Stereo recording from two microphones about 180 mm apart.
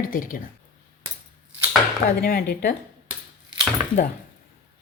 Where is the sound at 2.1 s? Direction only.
60° left (ahead or behind).